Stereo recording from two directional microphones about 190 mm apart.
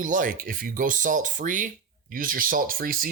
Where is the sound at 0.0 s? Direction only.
45° right (ahead or behind).